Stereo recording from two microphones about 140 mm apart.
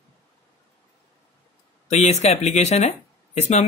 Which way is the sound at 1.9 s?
50° left (ahead or behind).